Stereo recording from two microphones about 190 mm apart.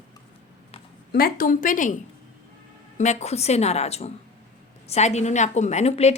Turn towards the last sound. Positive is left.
turn(degrees=35)  # may be behind; listen again after turning